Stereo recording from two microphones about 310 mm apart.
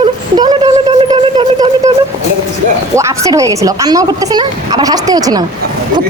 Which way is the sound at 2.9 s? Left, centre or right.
Centre.